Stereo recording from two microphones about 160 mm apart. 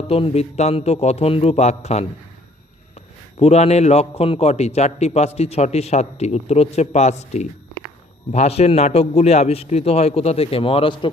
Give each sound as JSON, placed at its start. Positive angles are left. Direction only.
{"t": 0.1, "sound": "a man's voice", "side_deg": 40}
{"t": 3.3, "sound": "a man's voice", "side_deg": 40}